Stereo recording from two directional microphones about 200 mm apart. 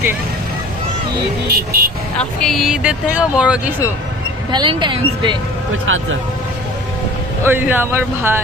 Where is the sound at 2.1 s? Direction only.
5° left (ahead or behind).